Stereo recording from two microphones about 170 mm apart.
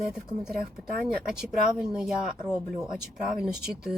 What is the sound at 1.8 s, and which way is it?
Speech, 5° right (ahead or behind).